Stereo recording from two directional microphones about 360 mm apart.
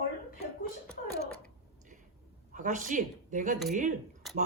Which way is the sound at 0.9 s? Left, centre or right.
Centre.